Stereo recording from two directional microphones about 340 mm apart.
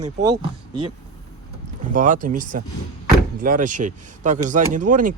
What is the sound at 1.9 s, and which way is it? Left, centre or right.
Speech, right.